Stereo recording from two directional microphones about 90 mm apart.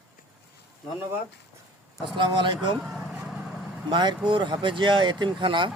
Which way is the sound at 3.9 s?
60° right (ahead or behind).